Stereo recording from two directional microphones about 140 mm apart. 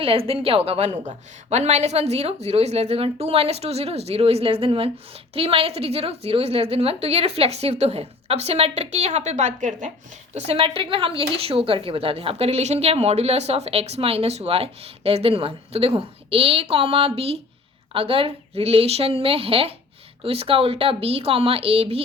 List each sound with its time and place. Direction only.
0.0 s a woman's voice: 40° right (ahead or behind); by 9.9 s 60° right (ahead or behind)
10.3 s a woman's voice: 45° right (ahead or behind)